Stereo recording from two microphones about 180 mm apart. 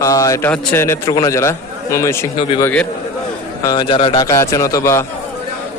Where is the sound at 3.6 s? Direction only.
25° left (ahead or behind).